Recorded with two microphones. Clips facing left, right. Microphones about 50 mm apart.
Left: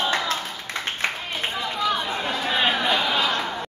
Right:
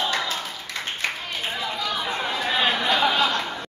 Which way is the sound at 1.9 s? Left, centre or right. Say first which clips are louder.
Even; centre.